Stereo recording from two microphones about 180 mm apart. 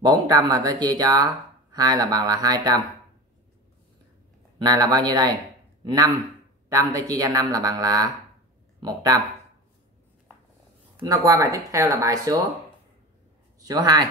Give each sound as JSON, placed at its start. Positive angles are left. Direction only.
{"t": 0.0, "sound": "speech", "side_deg": -25}
{"t": 4.6, "sound": "speech", "side_deg": -20}
{"t": 11.1, "sound": "speech", "side_deg": -15}
{"t": 13.6, "sound": "speech", "side_deg": -20}